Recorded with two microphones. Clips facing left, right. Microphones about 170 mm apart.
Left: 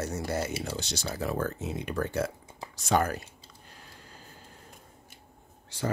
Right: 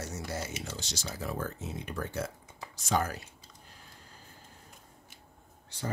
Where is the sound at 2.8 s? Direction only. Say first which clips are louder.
Left 4 dB; 60° left (ahead or behind).